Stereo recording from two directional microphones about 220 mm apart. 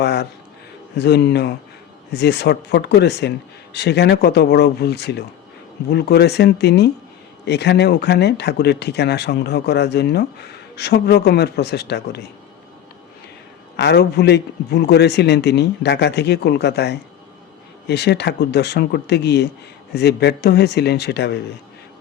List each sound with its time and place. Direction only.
0.0 s speech: 50° left (ahead or behind)
13.7 s speech: 50° left (ahead or behind)